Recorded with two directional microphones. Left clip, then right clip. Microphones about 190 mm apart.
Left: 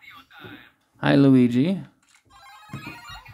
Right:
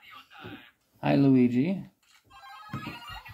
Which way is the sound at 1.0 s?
40° left (ahead or behind).